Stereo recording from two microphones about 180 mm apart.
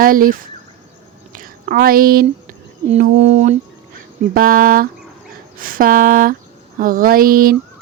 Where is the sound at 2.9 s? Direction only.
40° right (ahead or behind).